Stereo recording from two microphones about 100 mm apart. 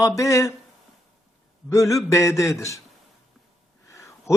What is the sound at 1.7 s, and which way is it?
A man's voice, 30° left (ahead or behind).